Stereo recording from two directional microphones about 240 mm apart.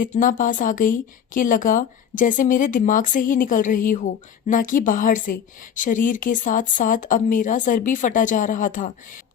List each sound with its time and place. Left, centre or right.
0.0 s speech: left